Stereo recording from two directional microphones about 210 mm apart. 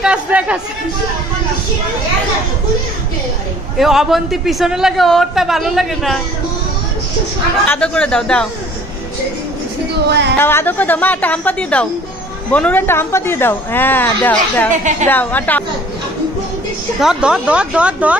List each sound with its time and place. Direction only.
0.0 s speech: 5° right (ahead or behind)
3.7 s a man's voice: centre (ahead or behind)
7.6 s a man's voice: 5° left (ahead or behind)
10.3 s speech: 10° left (ahead or behind)
14.7 s a woman's voice: 35° right (ahead or behind)
15.0 s speech: 10° left (ahead or behind)
17.0 s a man's voice: 5° right (ahead or behind)